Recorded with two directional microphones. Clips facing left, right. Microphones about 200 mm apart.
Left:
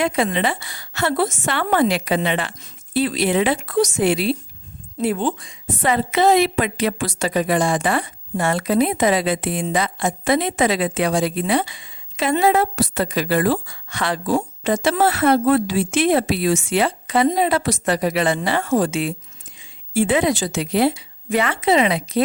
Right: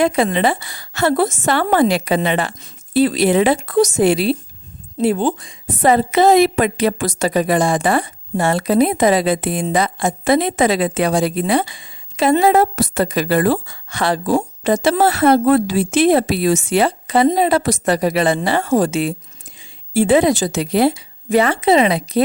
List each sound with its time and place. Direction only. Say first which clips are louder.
0.0 s a woman's voice: right 4 dB; 35° right (ahead or behind)